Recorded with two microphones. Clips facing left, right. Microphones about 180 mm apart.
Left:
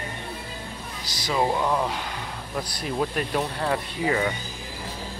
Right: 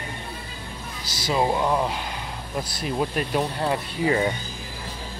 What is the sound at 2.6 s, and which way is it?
Speech, 25° right (ahead or behind).